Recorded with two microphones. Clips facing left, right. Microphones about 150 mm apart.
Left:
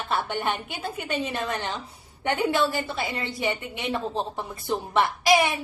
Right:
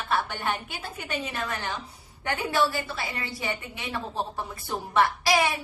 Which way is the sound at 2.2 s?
20° left (ahead or behind).